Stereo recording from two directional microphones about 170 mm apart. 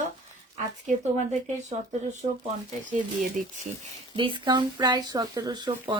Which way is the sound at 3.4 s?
50° right (ahead or behind).